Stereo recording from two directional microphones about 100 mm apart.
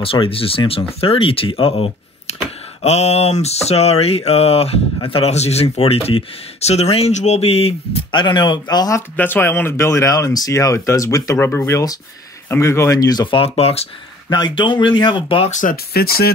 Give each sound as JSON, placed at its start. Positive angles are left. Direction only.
{"t": 0.0, "sound": "speech", "side_deg": 65}
{"t": 2.8, "sound": "speech", "side_deg": 90}
{"t": 8.1, "sound": "speech", "side_deg": 50}
{"t": 9.1, "sound": "speech", "side_deg": 20}
{"t": 13.4, "sound": "speech", "side_deg": 85}
{"t": 14.3, "sound": "speech", "side_deg": 50}